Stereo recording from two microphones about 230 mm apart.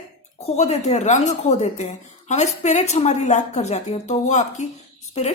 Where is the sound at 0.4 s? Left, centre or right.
Left.